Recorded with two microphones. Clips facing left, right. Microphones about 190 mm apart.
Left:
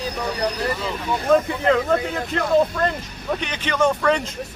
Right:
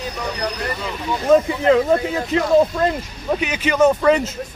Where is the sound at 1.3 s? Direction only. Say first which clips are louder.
Right 4 dB; 5° right (ahead or behind).